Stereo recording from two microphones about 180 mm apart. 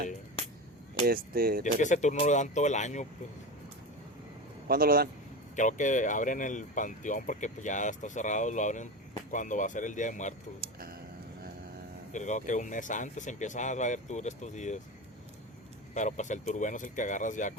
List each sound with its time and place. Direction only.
1.0 s speech: 55° right (ahead or behind)
1.6 s speech: 45° left (ahead or behind)
4.7 s speech: 55° right (ahead or behind)
5.5 s speech: 45° left (ahead or behind)
10.6 s a sound: 55° right (ahead or behind)
12.1 s speech: 45° left (ahead or behind)
16.0 s speech: 45° left (ahead or behind)